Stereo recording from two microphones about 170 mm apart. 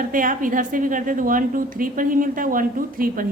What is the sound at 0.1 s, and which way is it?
A woman's voice, 55° right (ahead or behind).